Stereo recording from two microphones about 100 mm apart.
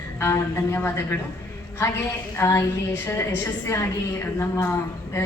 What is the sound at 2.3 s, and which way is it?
A woman's voice, 25° left (ahead or behind).